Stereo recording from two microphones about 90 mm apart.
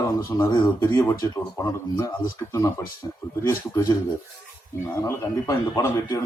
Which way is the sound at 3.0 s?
45° left (ahead or behind).